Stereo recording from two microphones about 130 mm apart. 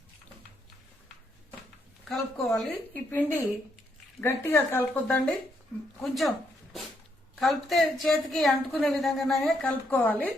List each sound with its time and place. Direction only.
2.0 s a woman's voice: centre (ahead or behind)
2.9 s a woman's voice: 15° left (ahead or behind); by 6.3 s centre (ahead or behind)
7.3 s a woman's voice: centre (ahead or behind)
9.6 s speech: 15° left (ahead or behind)